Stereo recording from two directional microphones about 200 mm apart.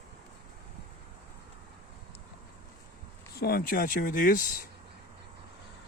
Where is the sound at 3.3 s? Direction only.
50° left (ahead or behind).